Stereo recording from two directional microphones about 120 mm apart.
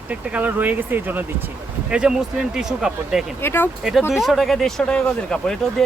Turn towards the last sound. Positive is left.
turn(degrees=5)  # may be behind; listen again after turning